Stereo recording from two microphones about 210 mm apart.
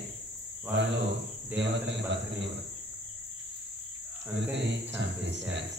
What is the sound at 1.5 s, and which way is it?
Speech, 10° right (ahead or behind).